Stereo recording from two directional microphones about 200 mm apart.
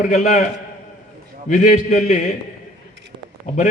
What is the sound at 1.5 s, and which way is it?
Speech, 40° left (ahead or behind).